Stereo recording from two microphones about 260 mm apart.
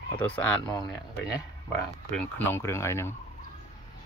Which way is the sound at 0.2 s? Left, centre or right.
Centre.